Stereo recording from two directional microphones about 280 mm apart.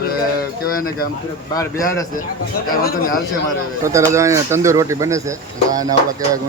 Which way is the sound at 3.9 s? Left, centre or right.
Centre.